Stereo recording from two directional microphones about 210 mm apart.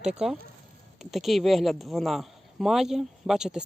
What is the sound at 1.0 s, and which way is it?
Speech, centre (ahead or behind).